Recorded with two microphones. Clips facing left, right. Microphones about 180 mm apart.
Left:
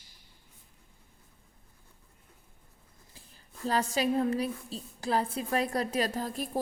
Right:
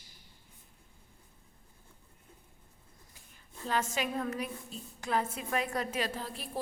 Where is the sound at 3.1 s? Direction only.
35° left (ahead or behind).